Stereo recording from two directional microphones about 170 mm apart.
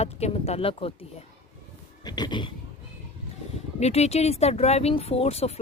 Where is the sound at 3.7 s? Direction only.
40° left (ahead or behind).